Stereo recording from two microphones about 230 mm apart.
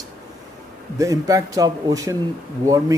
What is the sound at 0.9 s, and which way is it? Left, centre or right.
A man's voice, centre.